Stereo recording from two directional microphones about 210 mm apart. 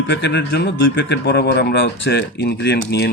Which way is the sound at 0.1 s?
55° left (ahead or behind).